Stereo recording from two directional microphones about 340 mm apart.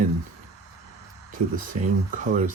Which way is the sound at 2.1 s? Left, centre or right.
Right.